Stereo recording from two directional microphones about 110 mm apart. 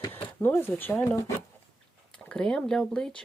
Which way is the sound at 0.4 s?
20° left (ahead or behind).